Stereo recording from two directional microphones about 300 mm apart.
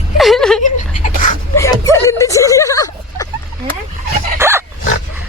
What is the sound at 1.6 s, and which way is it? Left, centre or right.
Speech, centre.